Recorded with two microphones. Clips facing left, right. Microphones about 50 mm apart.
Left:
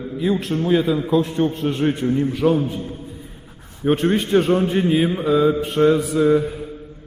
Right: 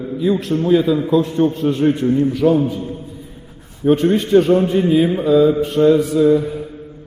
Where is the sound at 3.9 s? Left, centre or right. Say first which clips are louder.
Right 4 dB; centre.